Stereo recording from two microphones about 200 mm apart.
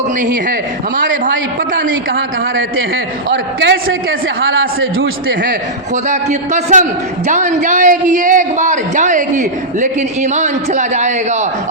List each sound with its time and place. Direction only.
0.2 s a man's voice: 40° right (ahead or behind)
2.1 s a man's voice: 70° right (ahead or behind)
5.4 s a man's voice: 40° right (ahead or behind)